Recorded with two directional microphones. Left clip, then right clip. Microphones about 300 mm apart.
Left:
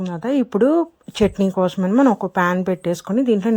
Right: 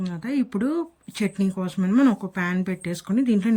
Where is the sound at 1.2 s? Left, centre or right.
Left.